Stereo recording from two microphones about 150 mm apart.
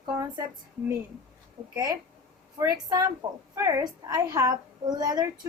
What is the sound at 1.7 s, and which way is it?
A woman's voice, 25° right (ahead or behind).